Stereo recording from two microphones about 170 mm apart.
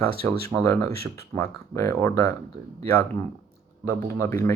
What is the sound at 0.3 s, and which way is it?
Speech, 20° left (ahead or behind).